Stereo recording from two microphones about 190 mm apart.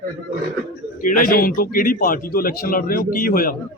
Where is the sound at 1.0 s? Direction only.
50° left (ahead or behind).